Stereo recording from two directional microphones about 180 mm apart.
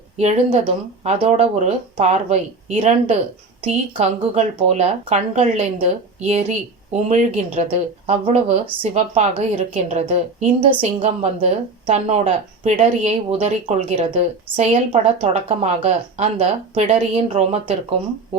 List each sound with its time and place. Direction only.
0.2 s a woman's voice: 40° right (ahead or behind)